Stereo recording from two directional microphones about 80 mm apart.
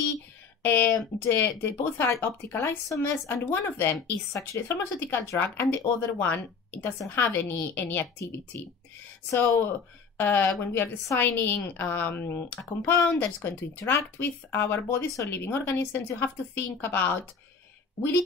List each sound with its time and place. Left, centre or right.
0.6 s speech: left
9.3 s speech: left
10.1 s speech: left
15.0 s speech: left
15.3 s speech: left